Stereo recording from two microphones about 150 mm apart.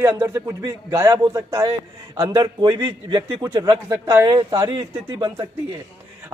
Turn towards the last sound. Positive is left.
turn(degrees=-25)  # may be behind; listen again after turning